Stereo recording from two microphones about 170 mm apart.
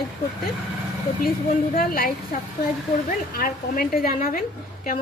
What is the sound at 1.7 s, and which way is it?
Speech, 60° left (ahead or behind).